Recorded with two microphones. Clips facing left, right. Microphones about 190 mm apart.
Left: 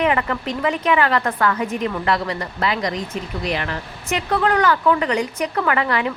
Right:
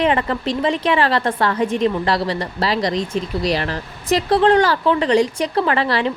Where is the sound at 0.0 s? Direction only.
30° right (ahead or behind).